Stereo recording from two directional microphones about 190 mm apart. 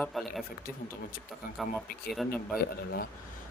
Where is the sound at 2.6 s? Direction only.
55° left (ahead or behind).